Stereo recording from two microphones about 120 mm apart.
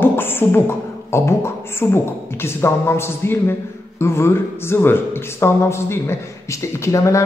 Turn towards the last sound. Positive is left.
turn(degrees=25)  # may be behind; listen again after turning